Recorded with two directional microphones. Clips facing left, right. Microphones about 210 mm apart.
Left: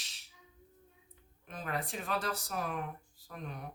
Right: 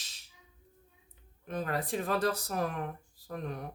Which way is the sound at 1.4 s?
40° right (ahead or behind).